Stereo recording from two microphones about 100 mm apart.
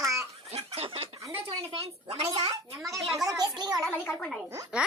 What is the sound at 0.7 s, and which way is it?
Chicken, 75° right (ahead or behind).